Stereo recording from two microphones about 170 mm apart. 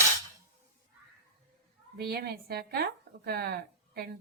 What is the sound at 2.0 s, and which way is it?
Speech, 65° right (ahead or behind).